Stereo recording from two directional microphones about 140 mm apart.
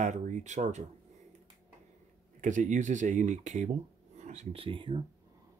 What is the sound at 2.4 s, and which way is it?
Speech, 60° right (ahead or behind).